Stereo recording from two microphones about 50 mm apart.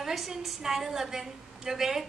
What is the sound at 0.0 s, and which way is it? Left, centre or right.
A woman's voice, centre.